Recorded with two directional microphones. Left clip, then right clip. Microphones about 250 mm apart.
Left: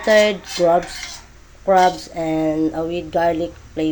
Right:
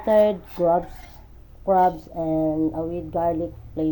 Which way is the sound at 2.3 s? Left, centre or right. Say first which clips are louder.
Left 3 dB; left.